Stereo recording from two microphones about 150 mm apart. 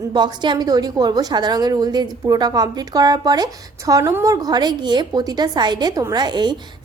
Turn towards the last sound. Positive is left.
turn(degrees=-30)  # may be behind; listen again after turning